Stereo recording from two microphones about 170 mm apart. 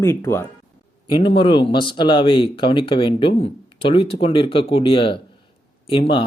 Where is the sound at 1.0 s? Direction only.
30° left (ahead or behind).